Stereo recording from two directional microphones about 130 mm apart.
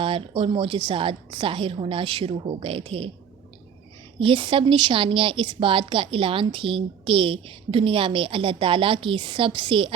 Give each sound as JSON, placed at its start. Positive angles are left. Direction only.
{"t": 0.0, "sound": "a woman's voice", "side_deg": -45}
{"t": 4.2, "sound": "a woman's voice", "side_deg": -40}